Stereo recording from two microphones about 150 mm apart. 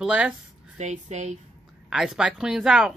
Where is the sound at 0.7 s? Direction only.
50° right (ahead or behind).